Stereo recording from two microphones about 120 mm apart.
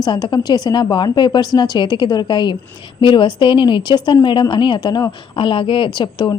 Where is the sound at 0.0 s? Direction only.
35° left (ahead or behind).